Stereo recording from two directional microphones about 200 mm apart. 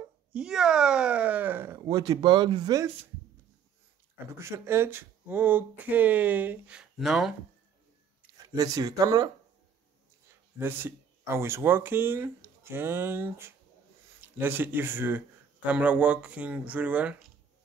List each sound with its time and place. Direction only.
0.3 s speech: 5° right (ahead or behind); by 2.9 s 20° right (ahead or behind)
4.4 s speech: 15° right (ahead or behind)
8.5 s speech: 20° right (ahead or behind)
10.6 s speech: 10° right (ahead or behind)